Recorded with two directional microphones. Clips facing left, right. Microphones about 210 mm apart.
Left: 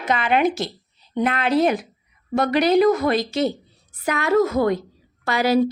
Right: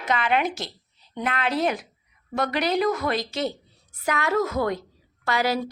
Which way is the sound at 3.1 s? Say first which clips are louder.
Left 6 dB; 10° left (ahead or behind).